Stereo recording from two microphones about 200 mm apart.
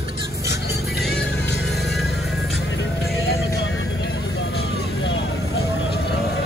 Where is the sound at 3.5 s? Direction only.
60° left (ahead or behind).